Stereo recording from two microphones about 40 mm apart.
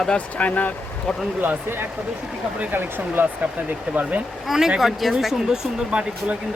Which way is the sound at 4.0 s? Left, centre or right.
Right.